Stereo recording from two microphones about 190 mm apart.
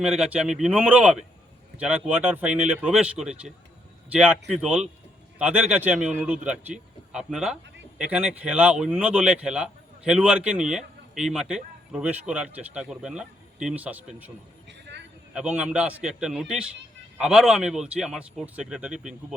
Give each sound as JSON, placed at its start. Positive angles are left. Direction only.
{"t": 0.0, "sound": "speech", "side_deg": -5}
{"t": 14.7, "sound": "a sound", "side_deg": -65}
{"t": 15.4, "sound": "speech", "side_deg": -5}